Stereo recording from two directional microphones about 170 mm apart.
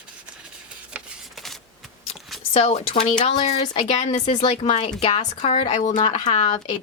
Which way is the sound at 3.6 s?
30° left (ahead or behind).